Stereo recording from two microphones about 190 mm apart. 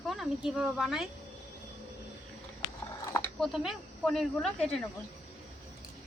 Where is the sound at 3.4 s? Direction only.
Centre (ahead or behind).